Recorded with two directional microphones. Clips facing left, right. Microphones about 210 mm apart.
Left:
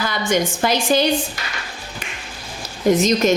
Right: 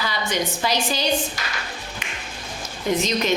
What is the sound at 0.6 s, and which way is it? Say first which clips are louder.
Speech: left 6 dB; 50° left (ahead or behind).